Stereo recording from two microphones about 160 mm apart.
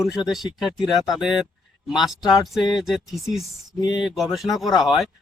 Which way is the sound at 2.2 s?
25° left (ahead or behind).